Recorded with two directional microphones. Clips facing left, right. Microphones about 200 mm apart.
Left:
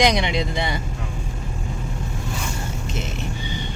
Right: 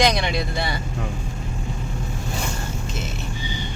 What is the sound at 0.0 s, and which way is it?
Vehicle, 15° left (ahead or behind).